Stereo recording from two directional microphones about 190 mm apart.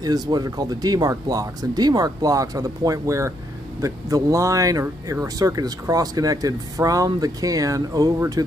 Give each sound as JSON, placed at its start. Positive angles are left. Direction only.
{"t": 0.0, "sound": "speech", "side_deg": -20}